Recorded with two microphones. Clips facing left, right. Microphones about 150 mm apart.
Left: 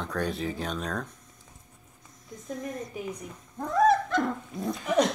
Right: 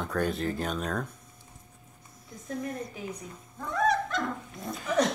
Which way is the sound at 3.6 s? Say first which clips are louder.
Left 5 dB; 40° left (ahead or behind).